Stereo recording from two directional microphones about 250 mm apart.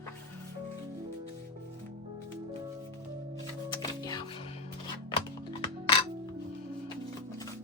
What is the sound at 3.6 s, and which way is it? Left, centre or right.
Music, centre.